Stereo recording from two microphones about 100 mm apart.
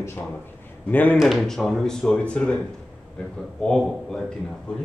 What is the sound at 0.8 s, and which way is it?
Speech, 15° left (ahead or behind).